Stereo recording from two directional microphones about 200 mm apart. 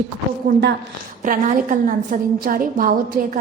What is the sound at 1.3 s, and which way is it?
A woman's voice, 40° right (ahead or behind).